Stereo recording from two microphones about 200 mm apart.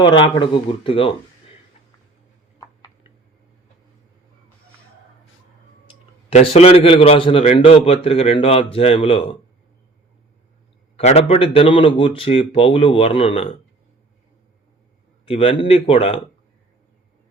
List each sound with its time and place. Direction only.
0.0 s a man's voice: 25° left (ahead or behind)
6.3 s a man's voice: 30° left (ahead or behind)
10.9 s a man's voice: 30° left (ahead or behind)
15.3 s a man's voice: 30° left (ahead or behind)